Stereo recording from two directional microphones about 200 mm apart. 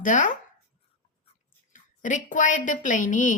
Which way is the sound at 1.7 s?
40° left (ahead or behind).